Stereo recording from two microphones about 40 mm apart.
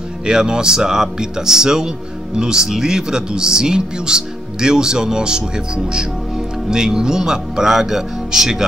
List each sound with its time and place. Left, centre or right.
0.3 s speech: centre